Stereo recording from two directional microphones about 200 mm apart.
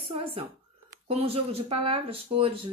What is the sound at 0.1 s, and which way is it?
Speech, 30° right (ahead or behind).